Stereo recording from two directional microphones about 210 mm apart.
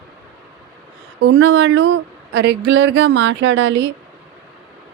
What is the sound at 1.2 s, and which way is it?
Speech, 60° right (ahead or behind).